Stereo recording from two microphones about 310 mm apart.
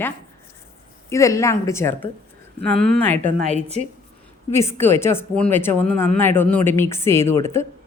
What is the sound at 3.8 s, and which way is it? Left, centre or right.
Speech, left.